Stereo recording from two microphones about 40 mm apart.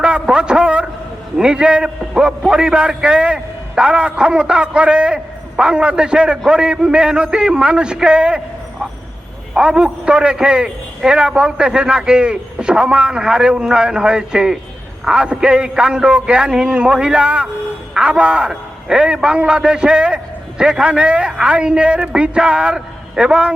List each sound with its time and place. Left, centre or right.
0.0 s a man's voice: right
9.6 s a man's voice: right